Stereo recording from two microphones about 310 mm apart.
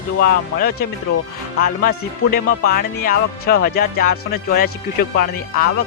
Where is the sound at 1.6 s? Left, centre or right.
Left.